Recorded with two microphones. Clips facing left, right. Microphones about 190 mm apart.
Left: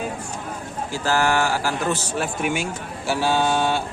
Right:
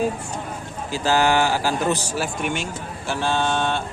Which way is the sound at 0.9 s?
20° right (ahead or behind).